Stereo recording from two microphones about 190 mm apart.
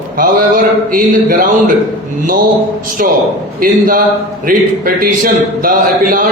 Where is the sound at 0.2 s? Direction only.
50° right (ahead or behind).